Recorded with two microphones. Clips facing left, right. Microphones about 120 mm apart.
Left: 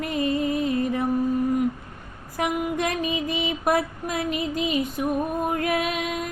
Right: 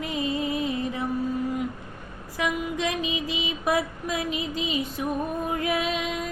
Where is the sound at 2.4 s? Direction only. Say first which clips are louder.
Left 3 dB; 55° left (ahead or behind).